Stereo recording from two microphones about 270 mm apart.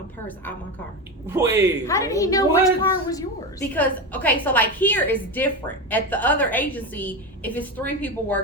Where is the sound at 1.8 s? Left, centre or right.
Centre.